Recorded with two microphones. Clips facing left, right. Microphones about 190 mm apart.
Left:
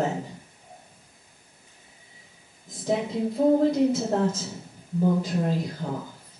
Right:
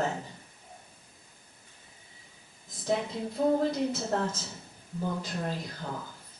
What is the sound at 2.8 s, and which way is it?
A woman's voice, 5° left (ahead or behind).